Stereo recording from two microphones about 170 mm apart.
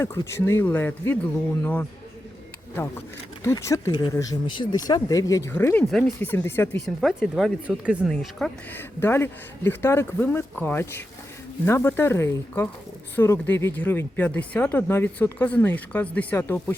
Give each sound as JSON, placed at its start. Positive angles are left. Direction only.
{"t": 0.0, "sound": "speech", "side_deg": 15}
{"t": 3.4, "sound": "speech", "side_deg": 15}
{"t": 5.8, "sound": "speech", "side_deg": 0}
{"t": 6.1, "sound": "speech", "side_deg": 15}
{"t": 6.8, "sound": "speech", "side_deg": 0}
{"t": 8.7, "sound": "speech", "side_deg": 15}